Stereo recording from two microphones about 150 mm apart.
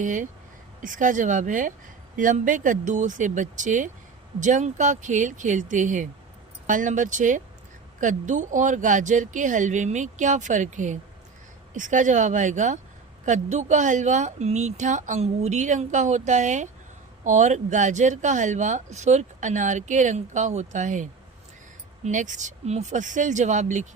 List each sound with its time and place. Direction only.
0.0 s speech: 60° right (ahead or behind)